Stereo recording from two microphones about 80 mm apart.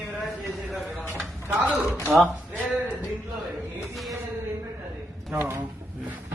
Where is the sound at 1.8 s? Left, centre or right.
Left.